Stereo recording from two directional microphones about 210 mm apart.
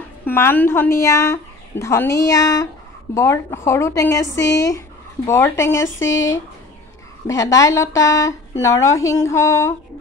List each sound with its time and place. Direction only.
0.2 s speech: 10° left (ahead or behind)
5.9 s speech: 65° left (ahead or behind)
7.2 s speech: 15° left (ahead or behind)